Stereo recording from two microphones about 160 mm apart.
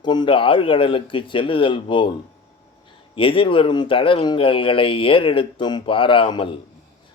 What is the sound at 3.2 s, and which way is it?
Speech, 35° left (ahead or behind).